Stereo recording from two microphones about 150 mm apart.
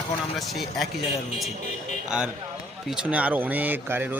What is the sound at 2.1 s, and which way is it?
Speech, 5° right (ahead or behind).